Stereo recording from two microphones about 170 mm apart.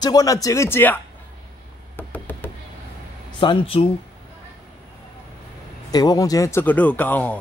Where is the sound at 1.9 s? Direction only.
10° left (ahead or behind).